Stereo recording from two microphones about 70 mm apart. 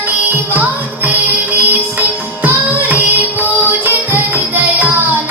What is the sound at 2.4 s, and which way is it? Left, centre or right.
Music, right.